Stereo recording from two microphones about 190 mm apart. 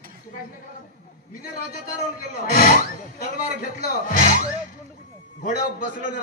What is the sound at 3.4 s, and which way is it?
Speech, 45° left (ahead or behind).